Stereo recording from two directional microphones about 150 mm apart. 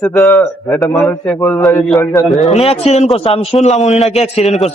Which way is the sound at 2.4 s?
40° left (ahead or behind).